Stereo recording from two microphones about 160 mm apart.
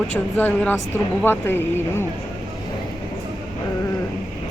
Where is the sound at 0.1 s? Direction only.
10° left (ahead or behind).